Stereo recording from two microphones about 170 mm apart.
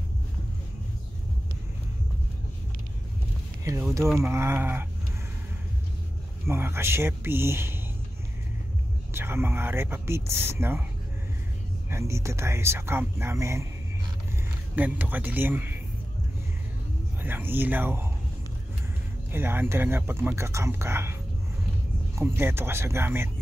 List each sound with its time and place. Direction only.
4.2 s speech: 15° right (ahead or behind)
6.4 s speech: 15° right (ahead or behind)
9.1 s speech: 15° right (ahead or behind)
11.9 s speech: 15° right (ahead or behind)
14.8 s speech: 10° right (ahead or behind)
17.2 s speech: 10° right (ahead or behind)
19.3 s speech: 10° right (ahead or behind)